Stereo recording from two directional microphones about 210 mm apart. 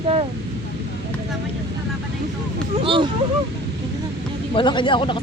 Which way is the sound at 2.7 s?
25° right (ahead or behind).